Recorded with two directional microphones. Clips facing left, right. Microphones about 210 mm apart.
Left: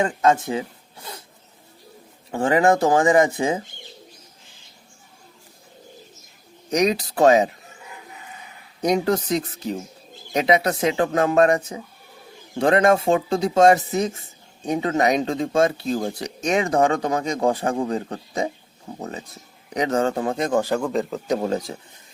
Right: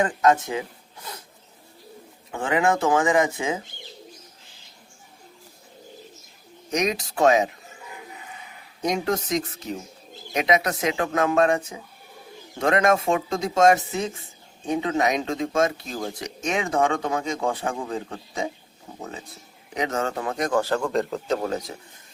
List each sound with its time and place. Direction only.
0.0 s speech: 30° left (ahead or behind)
2.3 s speech: 35° left (ahead or behind)
6.7 s speech: 35° left (ahead or behind)
8.8 s speech: 35° left (ahead or behind)
19.7 s speech: 35° left (ahead or behind); by 21.2 s centre (ahead or behind)
21.2 s speech: 20° left (ahead or behind)